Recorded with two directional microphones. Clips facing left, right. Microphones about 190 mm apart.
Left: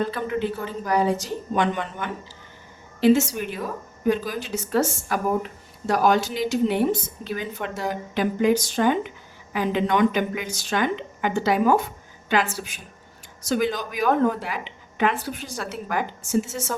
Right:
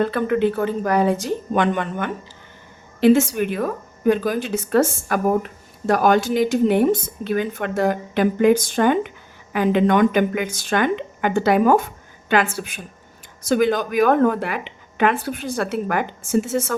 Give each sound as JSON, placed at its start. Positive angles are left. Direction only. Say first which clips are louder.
{"t": 0.0, "sound": "a woman's voice", "louder": "right 6 dB", "side_deg": -60}